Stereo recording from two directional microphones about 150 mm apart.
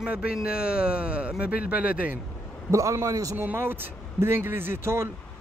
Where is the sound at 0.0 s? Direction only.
5° right (ahead or behind).